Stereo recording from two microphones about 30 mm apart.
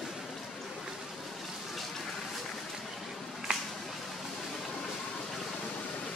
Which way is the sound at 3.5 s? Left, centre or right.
Right.